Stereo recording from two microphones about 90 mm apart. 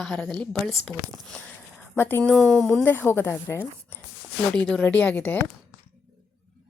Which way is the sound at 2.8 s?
25° left (ahead or behind).